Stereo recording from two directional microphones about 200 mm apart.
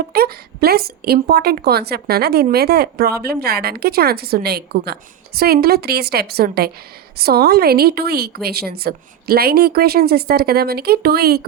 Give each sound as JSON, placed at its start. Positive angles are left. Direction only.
{"t": 0.1, "sound": "a woman's voice", "side_deg": -50}